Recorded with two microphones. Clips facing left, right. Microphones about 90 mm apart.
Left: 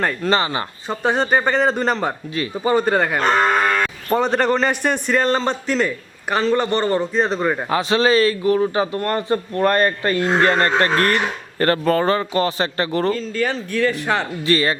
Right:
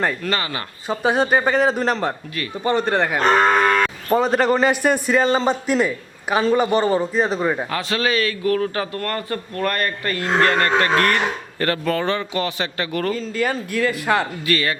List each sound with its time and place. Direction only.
0.3 s a man's voice: 25° left (ahead or behind)
0.9 s a man's voice: 5° right (ahead or behind)
7.7 s a man's voice: 25° left (ahead or behind)
8.5 s a man's voice: 20° left (ahead or behind)
13.1 s speech: 5° right (ahead or behind)
14.4 s a man's voice: 30° left (ahead or behind)